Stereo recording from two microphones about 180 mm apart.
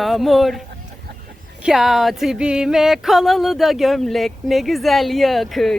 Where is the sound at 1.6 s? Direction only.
Centre (ahead or behind).